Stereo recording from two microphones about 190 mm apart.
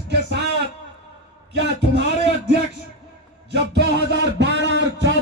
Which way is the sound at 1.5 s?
65° right (ahead or behind).